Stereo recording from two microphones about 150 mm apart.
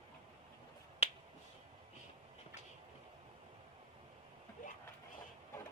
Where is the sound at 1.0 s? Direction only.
45° left (ahead or behind).